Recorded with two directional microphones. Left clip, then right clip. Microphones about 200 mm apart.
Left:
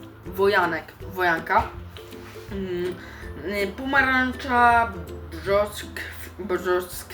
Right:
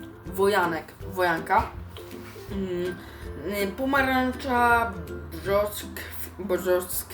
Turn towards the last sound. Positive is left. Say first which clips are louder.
# even
turn(degrees=0)  # may be behind; listen again after turning